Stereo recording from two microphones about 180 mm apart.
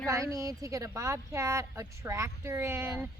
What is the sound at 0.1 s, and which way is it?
A woman's voice, 15° right (ahead or behind).